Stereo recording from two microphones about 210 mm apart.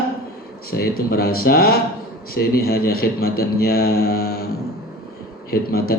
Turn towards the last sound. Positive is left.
turn(degrees=45)  # may be behind; listen again after turning